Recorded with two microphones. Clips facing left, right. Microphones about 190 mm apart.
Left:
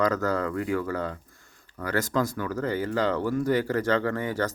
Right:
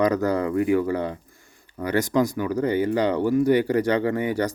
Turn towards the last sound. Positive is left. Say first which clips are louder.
# right 4 dB
turn(degrees=-15)  # may be behind; listen again after turning